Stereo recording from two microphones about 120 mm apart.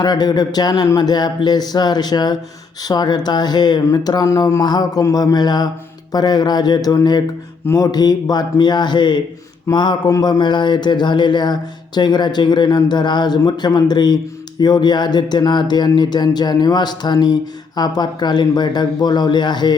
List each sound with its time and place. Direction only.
0.0 s speech: 35° left (ahead or behind)